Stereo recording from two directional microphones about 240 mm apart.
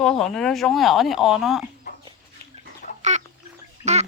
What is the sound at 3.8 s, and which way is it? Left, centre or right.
Bathtub, right.